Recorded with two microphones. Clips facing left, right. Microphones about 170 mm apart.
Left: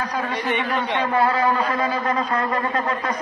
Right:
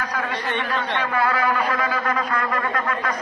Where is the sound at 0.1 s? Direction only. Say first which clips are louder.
Left 2 dB; 15° left (ahead or behind).